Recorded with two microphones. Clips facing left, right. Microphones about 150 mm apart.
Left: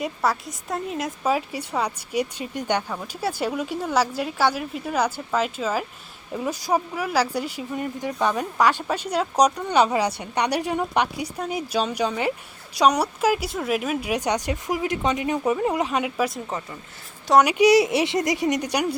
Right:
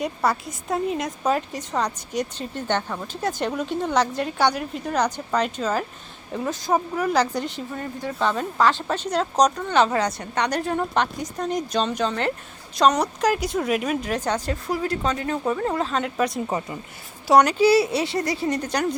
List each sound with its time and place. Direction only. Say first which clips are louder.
0.0 s speech: right 1 dB; centre (ahead or behind)
16.5 s speech: right 4 dB; 15° right (ahead or behind)
17.4 s speech: left 1 dB; 15° left (ahead or behind)